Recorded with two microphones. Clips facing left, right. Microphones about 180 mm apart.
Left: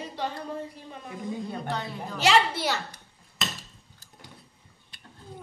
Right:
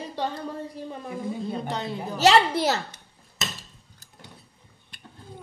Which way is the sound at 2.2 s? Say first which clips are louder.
Right 4 dB; 40° right (ahead or behind).